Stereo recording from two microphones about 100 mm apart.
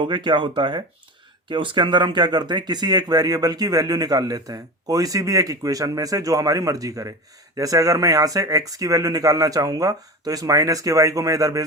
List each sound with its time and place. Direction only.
0.0 s speech: 50° right (ahead or behind); by 11.6 s 35° right (ahead or behind)